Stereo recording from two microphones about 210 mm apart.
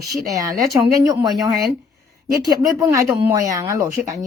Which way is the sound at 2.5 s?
15° right (ahead or behind).